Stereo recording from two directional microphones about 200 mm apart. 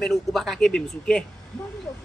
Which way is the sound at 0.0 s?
Centre (ahead or behind).